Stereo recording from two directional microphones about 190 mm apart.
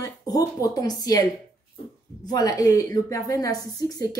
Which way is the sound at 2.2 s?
20° left (ahead or behind).